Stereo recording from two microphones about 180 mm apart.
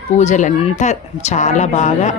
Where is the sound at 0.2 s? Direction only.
40° left (ahead or behind).